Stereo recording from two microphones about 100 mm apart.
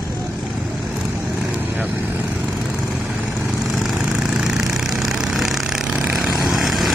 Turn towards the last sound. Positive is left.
turn(degrees=0)  # may be behind; listen again after turning